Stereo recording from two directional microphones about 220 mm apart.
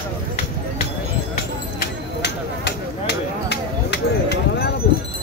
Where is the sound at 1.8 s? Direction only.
50° left (ahead or behind).